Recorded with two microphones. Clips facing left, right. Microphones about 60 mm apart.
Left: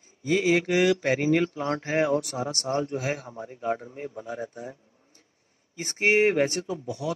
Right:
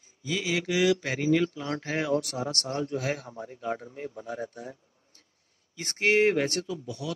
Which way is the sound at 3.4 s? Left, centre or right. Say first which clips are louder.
Left 4 dB; left.